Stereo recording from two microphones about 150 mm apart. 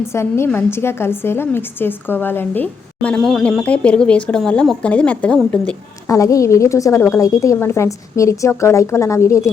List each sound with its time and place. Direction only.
0.1 s a woman's voice: 15° left (ahead or behind)
6.1 s a woman's voice: 20° left (ahead or behind)